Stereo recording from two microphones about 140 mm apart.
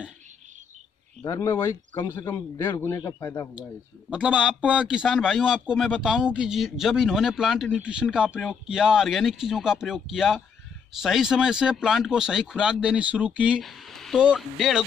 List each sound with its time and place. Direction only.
1.2 s speech: 25° left (ahead or behind)
4.1 s a man's voice: 10° right (ahead or behind)